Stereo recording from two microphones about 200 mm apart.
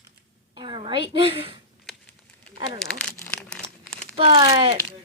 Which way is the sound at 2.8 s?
5° left (ahead or behind).